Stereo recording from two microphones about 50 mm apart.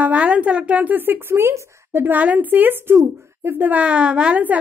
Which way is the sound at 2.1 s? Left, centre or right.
Right.